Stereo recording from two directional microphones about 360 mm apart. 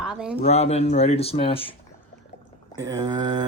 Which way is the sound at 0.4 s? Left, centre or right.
Centre.